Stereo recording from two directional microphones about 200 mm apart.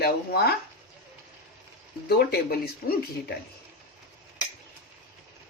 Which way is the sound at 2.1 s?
50° left (ahead or behind).